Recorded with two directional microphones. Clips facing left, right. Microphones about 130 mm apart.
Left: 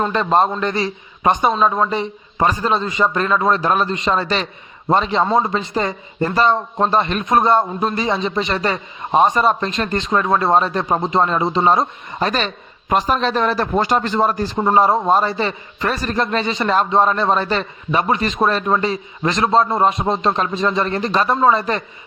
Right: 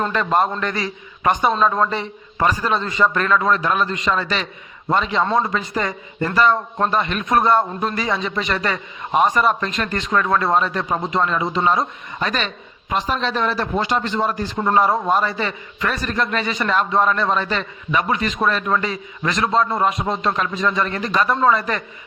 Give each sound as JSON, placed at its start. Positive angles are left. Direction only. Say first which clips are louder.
{"t": 0.0, "sound": "a man's voice", "louder": "left 3 dB", "side_deg": 25}